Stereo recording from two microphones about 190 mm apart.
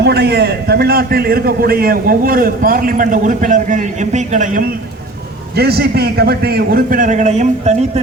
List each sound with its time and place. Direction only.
0.0 s a man's voice: 60° right (ahead or behind); by 4.6 s 40° right (ahead or behind)
5.5 s a man's voice: 55° right (ahead or behind); by 7.9 s 35° right (ahead or behind)